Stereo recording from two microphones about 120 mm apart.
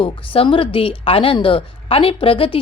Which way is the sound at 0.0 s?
50° left (ahead or behind).